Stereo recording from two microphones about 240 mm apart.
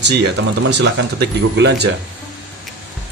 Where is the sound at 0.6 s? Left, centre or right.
Right.